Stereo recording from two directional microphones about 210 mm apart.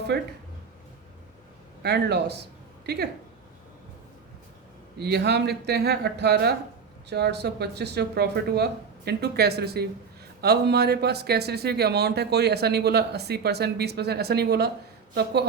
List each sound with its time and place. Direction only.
0.1 s speech: 55° right (ahead or behind)
1.8 s speech: 50° right (ahead or behind)
4.9 s speech: 50° right (ahead or behind)